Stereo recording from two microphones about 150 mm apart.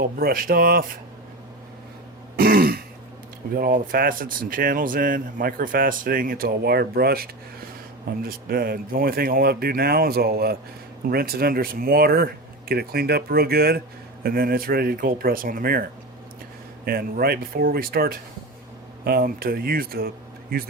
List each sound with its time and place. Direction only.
0.0 s speech: 80° right
2.3 s throat clearing: 85° right
3.5 s speech: 80° right
8.2 s speech: 80° right
16.8 s speech: 90° right